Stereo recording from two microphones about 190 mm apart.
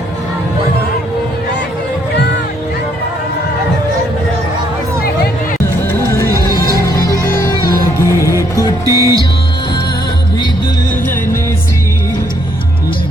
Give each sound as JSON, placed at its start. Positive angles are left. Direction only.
{"t": 5.9, "sound": "music", "side_deg": 15}
{"t": 6.3, "sound": "music", "side_deg": -15}
{"t": 6.8, "sound": "music", "side_deg": 20}
{"t": 8.9, "sound": "music", "side_deg": -15}